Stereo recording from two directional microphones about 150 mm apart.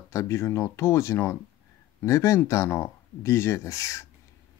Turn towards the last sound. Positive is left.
turn(degrees=20)  # may be behind; listen again after turning